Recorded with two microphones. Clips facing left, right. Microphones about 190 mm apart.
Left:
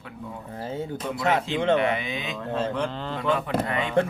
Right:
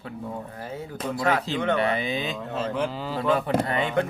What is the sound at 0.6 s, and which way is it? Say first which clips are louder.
Speech: left 3 dB; 25° left (ahead or behind).